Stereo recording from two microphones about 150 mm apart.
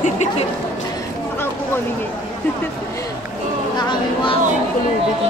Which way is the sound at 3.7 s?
30° left (ahead or behind).